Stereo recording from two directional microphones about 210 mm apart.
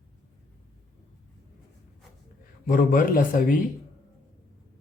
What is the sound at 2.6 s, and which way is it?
Speech, 40° left (ahead or behind).